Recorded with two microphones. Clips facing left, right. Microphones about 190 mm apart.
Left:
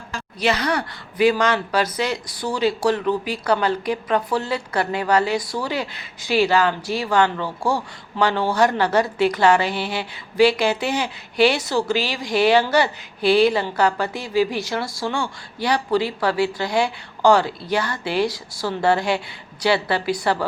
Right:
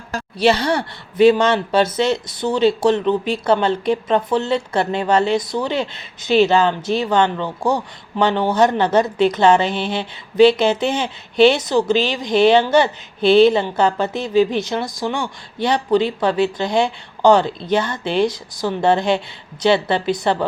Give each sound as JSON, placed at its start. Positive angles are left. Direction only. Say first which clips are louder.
{"t": 0.1, "sound": "speech", "louder": "right 6 dB", "side_deg": -30}